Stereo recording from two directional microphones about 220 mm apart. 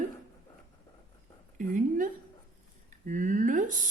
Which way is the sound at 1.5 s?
35° right (ahead or behind).